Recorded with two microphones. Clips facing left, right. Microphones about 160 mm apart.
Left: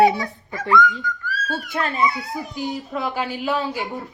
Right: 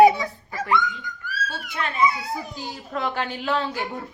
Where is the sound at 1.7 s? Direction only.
40° left (ahead or behind).